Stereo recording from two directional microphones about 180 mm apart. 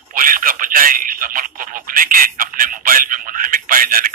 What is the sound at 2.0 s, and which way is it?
Speech, 50° right (ahead or behind).